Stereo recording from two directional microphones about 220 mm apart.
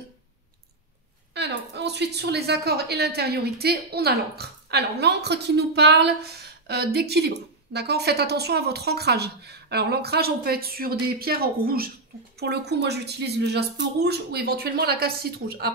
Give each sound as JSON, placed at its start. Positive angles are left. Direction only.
{"t": 1.3, "sound": "a woman's voice", "side_deg": -50}